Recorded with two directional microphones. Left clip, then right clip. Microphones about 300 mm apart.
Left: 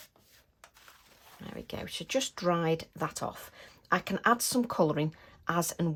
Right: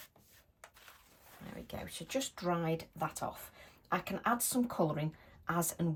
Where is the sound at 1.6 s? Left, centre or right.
Centre.